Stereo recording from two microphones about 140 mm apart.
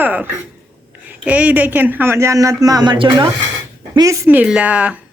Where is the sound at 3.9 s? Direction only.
25° right (ahead or behind).